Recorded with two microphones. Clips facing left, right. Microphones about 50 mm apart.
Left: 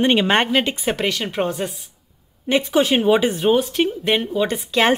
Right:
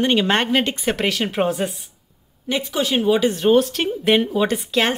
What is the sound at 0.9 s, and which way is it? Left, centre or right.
Speech, centre.